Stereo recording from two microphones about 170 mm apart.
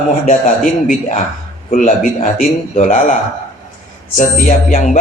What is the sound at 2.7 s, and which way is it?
Speech, 45° left (ahead or behind).